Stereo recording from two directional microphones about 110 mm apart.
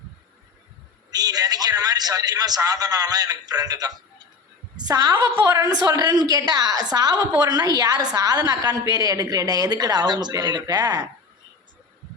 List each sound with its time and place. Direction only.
1.1 s a woman's voice: 35° right (ahead or behind)